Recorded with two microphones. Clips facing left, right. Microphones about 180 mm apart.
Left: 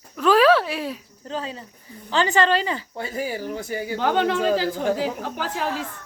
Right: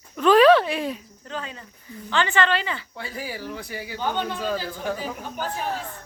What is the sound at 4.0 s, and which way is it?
Speech, 90° left.